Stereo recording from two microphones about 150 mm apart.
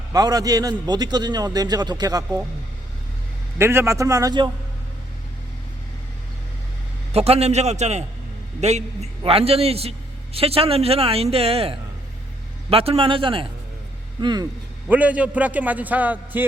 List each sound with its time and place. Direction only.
0.1 s a man's voice: 25° right (ahead or behind)
3.6 s a man's voice: 15° right (ahead or behind)
7.1 s a man's voice: 40° right (ahead or behind)
14.8 s a man's voice: 10° right (ahead or behind)